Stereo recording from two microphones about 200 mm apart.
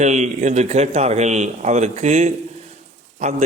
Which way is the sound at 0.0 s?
35° right (ahead or behind).